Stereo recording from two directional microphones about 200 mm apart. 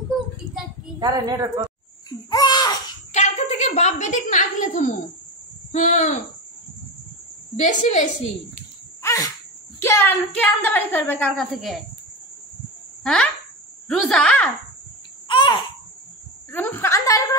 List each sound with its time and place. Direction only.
0.9 s a woman's voice: 20° right (ahead or behind)
2.0 s babbling: 20° left (ahead or behind)
3.1 s a sound: 35° left (ahead or behind)
5.7 s speech: 40° left (ahead or behind)
7.5 s a woman's voice: 35° left (ahead or behind)
9.0 s a sound: 15° left (ahead or behind)
9.8 s a woman's voice: 10° left (ahead or behind)
13.0 s speech: 5° left (ahead or behind)
15.2 s babbling: 25° left (ahead or behind)
16.5 s a sound: 10° left (ahead or behind)